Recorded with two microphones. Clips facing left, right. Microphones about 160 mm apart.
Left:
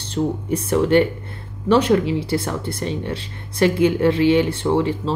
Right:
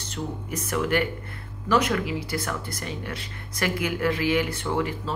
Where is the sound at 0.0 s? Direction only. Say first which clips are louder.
Left 10 dB; 30° left (ahead or behind).